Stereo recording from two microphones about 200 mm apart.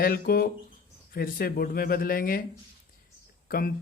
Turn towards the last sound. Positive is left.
turn(degrees=45)  # may be behind; listen again after turning